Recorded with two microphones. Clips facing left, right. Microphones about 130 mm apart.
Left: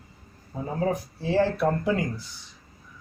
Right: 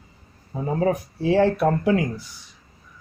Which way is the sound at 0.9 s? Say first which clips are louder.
Right 5 dB; 70° right (ahead or behind).